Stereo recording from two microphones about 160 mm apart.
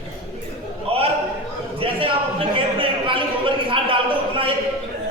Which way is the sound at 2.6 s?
35° right (ahead or behind).